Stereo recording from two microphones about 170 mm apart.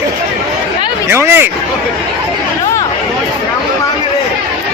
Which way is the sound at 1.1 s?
15° right (ahead or behind).